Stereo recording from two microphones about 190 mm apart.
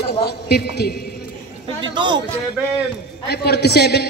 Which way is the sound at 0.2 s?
55° left (ahead or behind).